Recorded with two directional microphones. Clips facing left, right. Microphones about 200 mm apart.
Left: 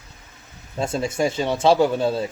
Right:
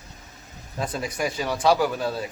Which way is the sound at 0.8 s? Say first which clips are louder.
Left 5 dB; 25° left (ahead or behind).